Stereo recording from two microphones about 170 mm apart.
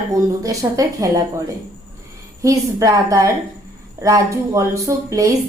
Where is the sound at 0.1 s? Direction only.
20° right (ahead or behind).